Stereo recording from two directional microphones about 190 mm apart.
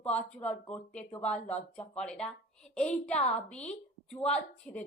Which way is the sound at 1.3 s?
35° left (ahead or behind).